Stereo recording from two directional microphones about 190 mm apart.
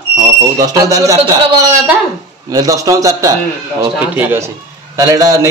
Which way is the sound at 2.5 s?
20° right (ahead or behind).